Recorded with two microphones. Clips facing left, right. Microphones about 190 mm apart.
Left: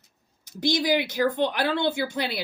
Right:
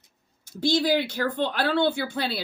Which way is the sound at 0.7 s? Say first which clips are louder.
Right 1 dB; 15° left (ahead or behind).